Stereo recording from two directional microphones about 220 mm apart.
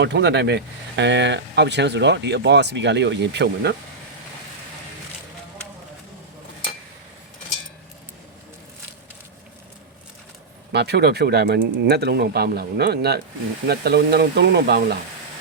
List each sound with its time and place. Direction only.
0.0 s speech: 50° right (ahead or behind)
10.7 s speech: 50° right (ahead or behind)